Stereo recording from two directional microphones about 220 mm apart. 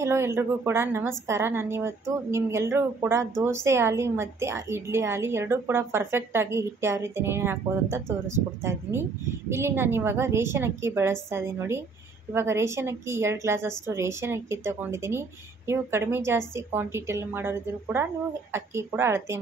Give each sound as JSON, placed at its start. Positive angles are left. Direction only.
{"t": 0.0, "sound": "a woman's voice", "side_deg": -10}